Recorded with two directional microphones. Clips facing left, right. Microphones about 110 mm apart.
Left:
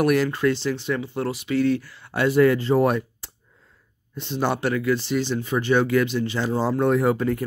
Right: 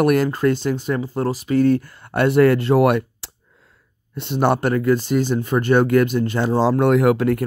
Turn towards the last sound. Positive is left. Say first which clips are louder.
# right 4 dB
turn(degrees=-75)  # may be behind; listen again after turning